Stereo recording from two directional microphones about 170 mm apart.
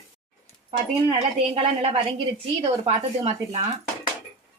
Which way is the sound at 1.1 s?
35° right (ahead or behind).